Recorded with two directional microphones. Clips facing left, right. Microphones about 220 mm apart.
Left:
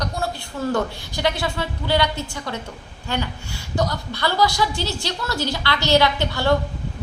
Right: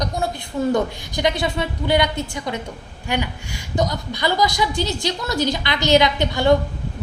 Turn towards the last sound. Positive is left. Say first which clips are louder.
# right 3 dB
turn(degrees=-15)  # may be behind; listen again after turning